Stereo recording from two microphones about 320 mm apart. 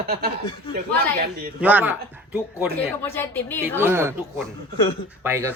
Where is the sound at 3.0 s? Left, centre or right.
Centre.